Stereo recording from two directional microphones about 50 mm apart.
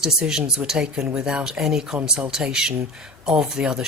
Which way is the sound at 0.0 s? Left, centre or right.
Centre.